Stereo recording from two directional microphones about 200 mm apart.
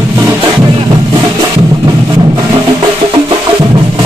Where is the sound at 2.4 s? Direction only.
25° right (ahead or behind).